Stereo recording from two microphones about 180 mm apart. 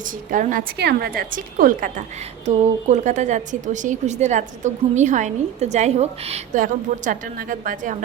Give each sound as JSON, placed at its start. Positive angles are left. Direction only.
{"t": 0.3, "sound": "a woman's voice", "side_deg": -50}